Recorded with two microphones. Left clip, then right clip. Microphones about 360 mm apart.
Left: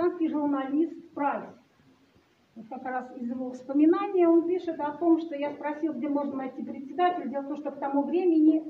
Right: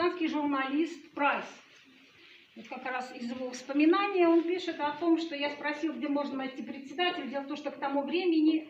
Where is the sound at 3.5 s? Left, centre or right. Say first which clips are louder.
Left 3 dB; left.